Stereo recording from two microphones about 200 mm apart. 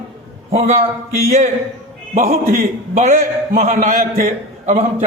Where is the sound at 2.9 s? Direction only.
40° right (ahead or behind).